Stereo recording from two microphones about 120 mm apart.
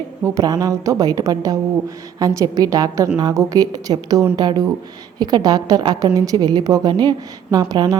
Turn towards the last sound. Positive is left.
turn(degrees=-30)  # may be behind; listen again after turning